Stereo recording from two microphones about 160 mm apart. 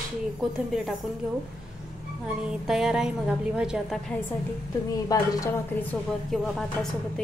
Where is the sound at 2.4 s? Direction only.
5° right (ahead or behind).